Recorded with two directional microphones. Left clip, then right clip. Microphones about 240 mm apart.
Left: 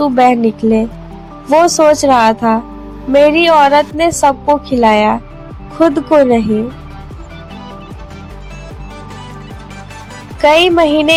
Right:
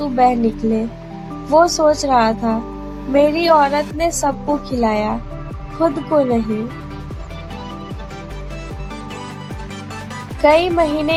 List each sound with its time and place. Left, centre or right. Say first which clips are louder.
0.0 s a woman's voice: left 5 dB; left
10.4 s a woman's voice: left 5 dB; left